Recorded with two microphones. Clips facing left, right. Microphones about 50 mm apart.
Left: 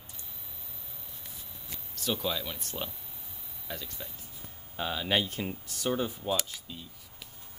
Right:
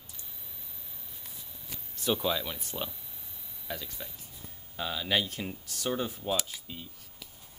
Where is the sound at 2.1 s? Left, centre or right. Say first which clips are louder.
Right 2 dB; centre.